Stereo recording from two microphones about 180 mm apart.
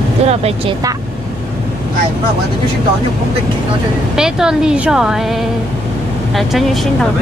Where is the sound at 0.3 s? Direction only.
35° right (ahead or behind).